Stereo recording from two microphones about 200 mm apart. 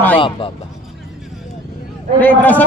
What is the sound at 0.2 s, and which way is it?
Speech, 25° left (ahead or behind).